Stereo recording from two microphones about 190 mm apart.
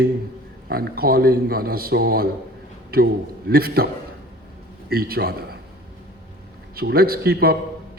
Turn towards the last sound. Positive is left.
turn(degrees=-55)  # may be behind; listen again after turning